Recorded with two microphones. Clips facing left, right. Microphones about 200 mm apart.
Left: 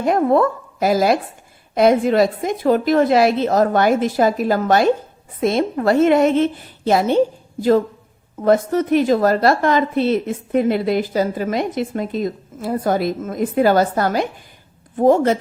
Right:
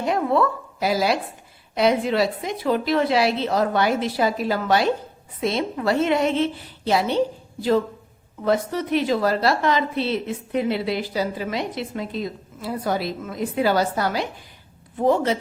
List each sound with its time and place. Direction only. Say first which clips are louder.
0.0 s a woman's voice: left 5 dB; 45° left (ahead or behind)
8.4 s a woman's voice: left 6 dB; 45° left (ahead or behind)